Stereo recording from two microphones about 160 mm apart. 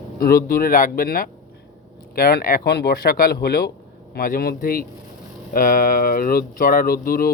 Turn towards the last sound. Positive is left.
turn(degrees=65)  # may be behind; listen again after turning